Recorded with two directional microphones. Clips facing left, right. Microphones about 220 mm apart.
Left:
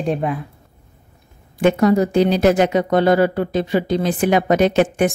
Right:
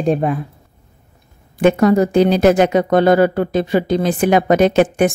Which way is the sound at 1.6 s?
50° right (ahead or behind).